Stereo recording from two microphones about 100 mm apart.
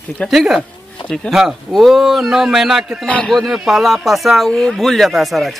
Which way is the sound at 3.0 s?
10° left (ahead or behind).